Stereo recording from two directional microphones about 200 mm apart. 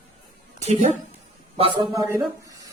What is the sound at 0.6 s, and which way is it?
Speech, 35° right (ahead or behind).